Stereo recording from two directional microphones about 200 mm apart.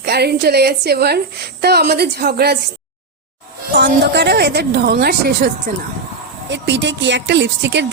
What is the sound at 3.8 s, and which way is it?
A woman's voice, 55° right (ahead or behind).